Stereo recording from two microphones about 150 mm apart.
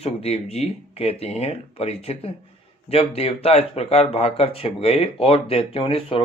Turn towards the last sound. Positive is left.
turn(degrees=40)  # may be behind; listen again after turning